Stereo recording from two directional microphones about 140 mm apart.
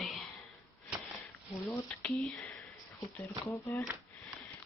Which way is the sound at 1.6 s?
10° left (ahead or behind).